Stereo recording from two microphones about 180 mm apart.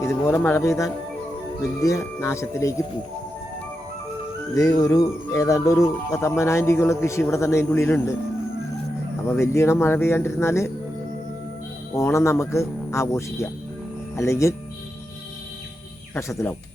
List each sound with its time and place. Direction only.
0.0 s speech: 15° left (ahead or behind)
4.5 s speech: 20° left (ahead or behind)
9.2 s speech: 15° left (ahead or behind)
11.9 s speech: 15° left (ahead or behind)
16.1 s speech: 15° left (ahead or behind)